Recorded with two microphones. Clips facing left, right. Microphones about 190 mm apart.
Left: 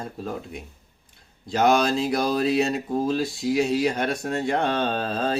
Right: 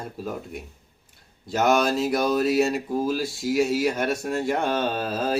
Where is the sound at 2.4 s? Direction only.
5° right (ahead or behind).